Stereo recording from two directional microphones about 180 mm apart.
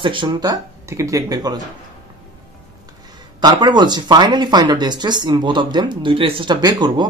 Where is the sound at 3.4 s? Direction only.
25° right (ahead or behind).